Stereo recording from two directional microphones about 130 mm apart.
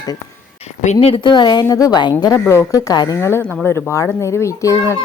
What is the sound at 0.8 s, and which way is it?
Speech, 45° left (ahead or behind).